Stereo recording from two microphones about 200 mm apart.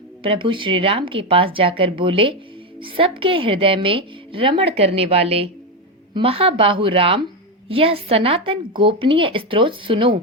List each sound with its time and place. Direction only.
0.2 s a woman's voice: 25° right (ahead or behind)